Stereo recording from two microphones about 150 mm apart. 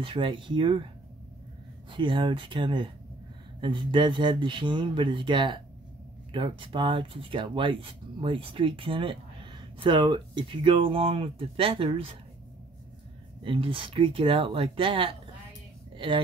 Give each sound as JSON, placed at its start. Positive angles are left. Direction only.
{"t": 0.0, "sound": "speech", "side_deg": -35}
{"t": 1.9, "sound": "speech", "side_deg": -35}
{"t": 13.4, "sound": "speech", "side_deg": -35}